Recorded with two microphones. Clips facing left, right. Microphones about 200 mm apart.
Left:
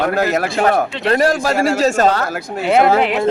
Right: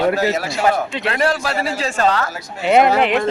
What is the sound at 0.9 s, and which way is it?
Speech, 40° left (ahead or behind).